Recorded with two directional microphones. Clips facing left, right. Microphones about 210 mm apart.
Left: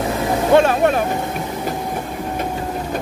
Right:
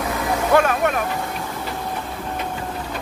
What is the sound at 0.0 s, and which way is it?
Speech, 25° left (ahead or behind).